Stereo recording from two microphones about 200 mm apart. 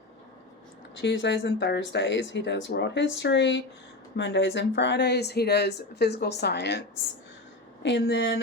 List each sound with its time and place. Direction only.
1.0 s speech: 60° left (ahead or behind)